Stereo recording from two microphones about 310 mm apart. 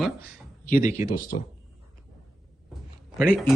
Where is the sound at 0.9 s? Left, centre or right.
Centre.